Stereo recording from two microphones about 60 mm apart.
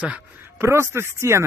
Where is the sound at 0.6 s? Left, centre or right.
Right.